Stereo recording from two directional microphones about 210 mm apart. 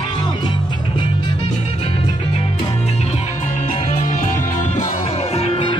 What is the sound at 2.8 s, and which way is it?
Music, 30° left (ahead or behind).